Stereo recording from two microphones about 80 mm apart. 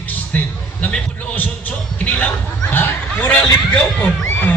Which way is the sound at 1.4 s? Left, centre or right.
Centre.